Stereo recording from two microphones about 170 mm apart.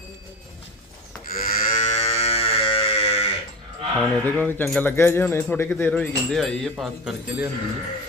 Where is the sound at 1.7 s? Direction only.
40° left (ahead or behind).